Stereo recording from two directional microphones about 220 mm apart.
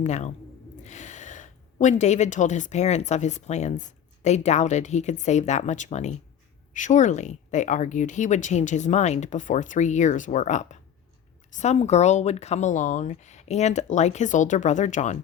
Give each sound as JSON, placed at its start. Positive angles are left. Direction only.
{"t": 0.0, "sound": "speech", "side_deg": 30}